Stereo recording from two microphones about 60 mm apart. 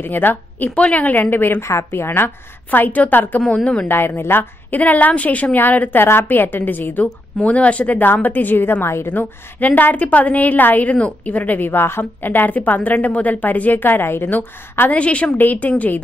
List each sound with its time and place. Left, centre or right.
0.0 s a woman's voice: left
0.7 s a woman's voice: left
1.6 s a woman's voice: left
1.9 s a woman's voice: left
3.9 s a woman's voice: left